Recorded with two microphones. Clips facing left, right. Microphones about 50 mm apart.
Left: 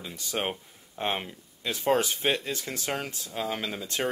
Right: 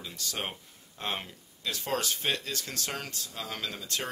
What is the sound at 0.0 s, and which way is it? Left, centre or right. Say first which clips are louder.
Speech: left 5 dB; left.